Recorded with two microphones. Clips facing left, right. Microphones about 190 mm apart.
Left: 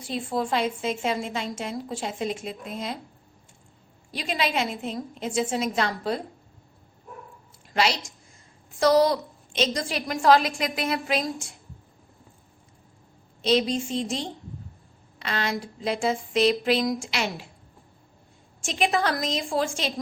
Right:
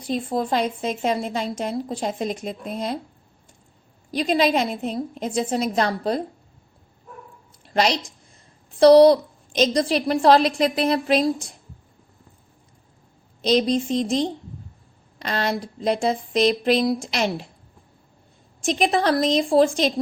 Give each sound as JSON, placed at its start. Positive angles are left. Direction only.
{"t": 0.0, "sound": "a woman's voice", "side_deg": -40}
{"t": 4.1, "sound": "a woman's voice", "side_deg": -35}
{"t": 7.7, "sound": "a woman's voice", "side_deg": -35}
{"t": 13.4, "sound": "a woman's voice", "side_deg": -40}
{"t": 18.6, "sound": "a woman's voice", "side_deg": -35}